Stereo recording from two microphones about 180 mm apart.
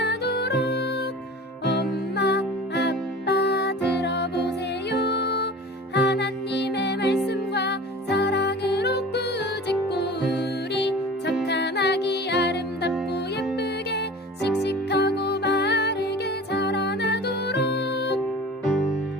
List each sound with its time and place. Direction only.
0.0 s music: 65° left (ahead or behind)
2.1 s music: 70° left (ahead or behind)
14.6 s music: 65° left (ahead or behind)